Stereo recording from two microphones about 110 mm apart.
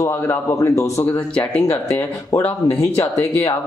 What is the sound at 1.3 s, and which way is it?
Speech, 10° left (ahead or behind).